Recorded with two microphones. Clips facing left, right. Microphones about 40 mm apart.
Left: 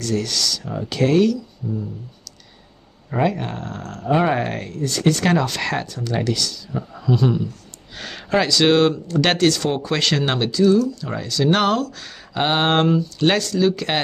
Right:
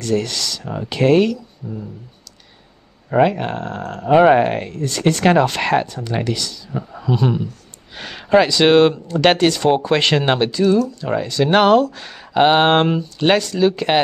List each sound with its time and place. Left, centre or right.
0.0 s speech: right
3.1 s speech: right